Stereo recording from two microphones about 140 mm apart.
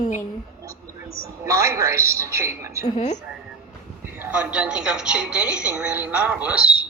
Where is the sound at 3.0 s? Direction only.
55° left (ahead or behind).